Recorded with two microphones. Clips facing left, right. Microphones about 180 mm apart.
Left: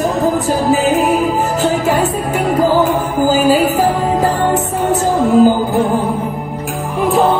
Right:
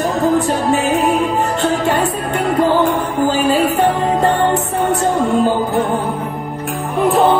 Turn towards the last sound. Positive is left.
turn(degrees=0)  # may be behind; listen again after turning